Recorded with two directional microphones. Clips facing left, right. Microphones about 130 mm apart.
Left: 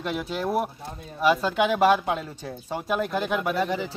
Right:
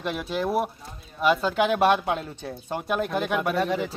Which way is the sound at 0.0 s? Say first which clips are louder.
Right 1 dB; centre (ahead or behind).